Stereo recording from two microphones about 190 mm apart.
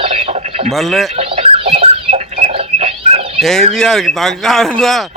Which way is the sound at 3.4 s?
Centre (ahead or behind).